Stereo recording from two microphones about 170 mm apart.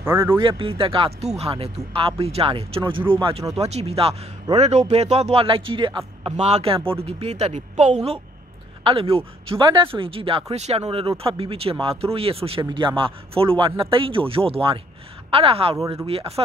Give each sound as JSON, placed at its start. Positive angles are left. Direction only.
{"t": 0.0, "sound": "speech", "side_deg": -15}
{"t": 0.4, "sound": "speech", "side_deg": -30}
{"t": 15.7, "sound": "speech", "side_deg": -20}
{"t": 16.1, "sound": "speech", "side_deg": -35}